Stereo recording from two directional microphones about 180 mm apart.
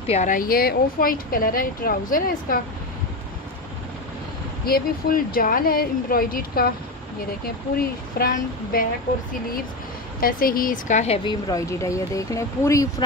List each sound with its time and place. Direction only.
0.0 s speech: 40° left (ahead or behind)
4.6 s speech: 55° left (ahead or behind)
10.2 s speech: 55° left (ahead or behind)
11.2 s speech: 20° left (ahead or behind)